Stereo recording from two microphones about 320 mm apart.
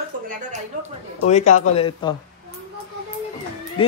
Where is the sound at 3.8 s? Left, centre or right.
Centre.